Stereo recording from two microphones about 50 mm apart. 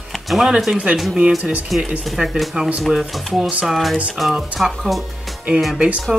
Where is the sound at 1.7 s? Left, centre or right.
Centre.